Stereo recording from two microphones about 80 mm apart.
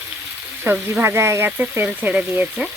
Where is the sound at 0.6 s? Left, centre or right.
Right.